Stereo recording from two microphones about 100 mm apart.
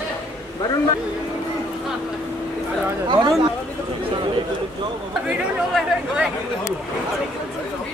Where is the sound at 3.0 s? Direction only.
45° right (ahead or behind).